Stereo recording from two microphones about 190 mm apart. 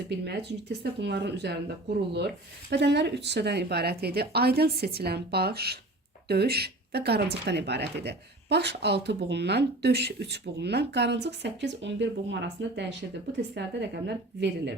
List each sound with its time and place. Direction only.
0.3 s speech: 60° right (ahead or behind)